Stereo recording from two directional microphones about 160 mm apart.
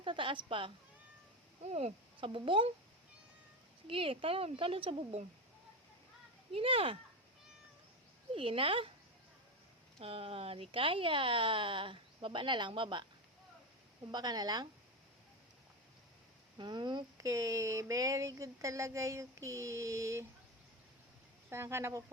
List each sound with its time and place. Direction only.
0.0 s speech: 30° right (ahead or behind)
3.8 s speech: 35° right (ahead or behind)
6.5 s speech: 35° right (ahead or behind)
8.4 s speech: 35° right (ahead or behind)
10.0 s speech: 35° right (ahead or behind)
14.1 s speech: 25° right (ahead or behind)
16.6 s speech: 25° right (ahead or behind)
21.5 s speech: 15° right (ahead or behind)